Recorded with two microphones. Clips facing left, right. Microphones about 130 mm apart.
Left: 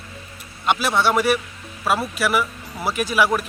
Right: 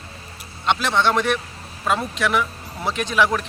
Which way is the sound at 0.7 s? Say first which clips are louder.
Even; 10° left (ahead or behind).